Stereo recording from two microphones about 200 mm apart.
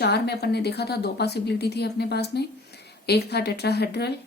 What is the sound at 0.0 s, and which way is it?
A woman's voice, 55° left (ahead or behind).